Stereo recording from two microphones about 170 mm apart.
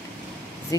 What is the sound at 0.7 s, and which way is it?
Speech, 20° left (ahead or behind).